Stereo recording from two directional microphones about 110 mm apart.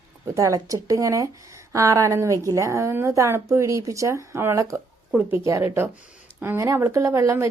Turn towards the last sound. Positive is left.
turn(degrees=-25)  # may be behind; listen again after turning